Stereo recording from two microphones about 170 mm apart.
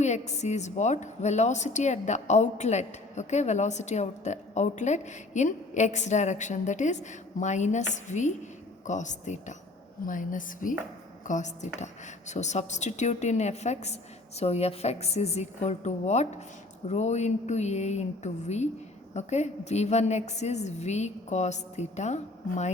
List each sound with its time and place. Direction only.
0.0 s a woman's voice: 40° left (ahead or behind)